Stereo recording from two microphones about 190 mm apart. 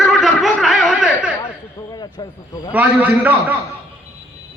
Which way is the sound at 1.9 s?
20° left (ahead or behind).